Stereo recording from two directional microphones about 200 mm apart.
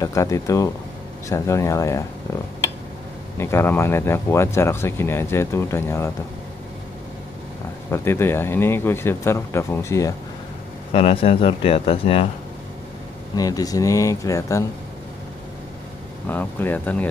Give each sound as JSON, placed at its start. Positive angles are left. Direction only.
{"t": 0.0, "sound": "speech", "side_deg": 15}
{"t": 3.3, "sound": "speech", "side_deg": 10}
{"t": 7.9, "sound": "speech", "side_deg": 10}
{"t": 10.9, "sound": "speech", "side_deg": 30}
{"t": 13.4, "sound": "speech", "side_deg": 20}
{"t": 16.3, "sound": "speech", "side_deg": 10}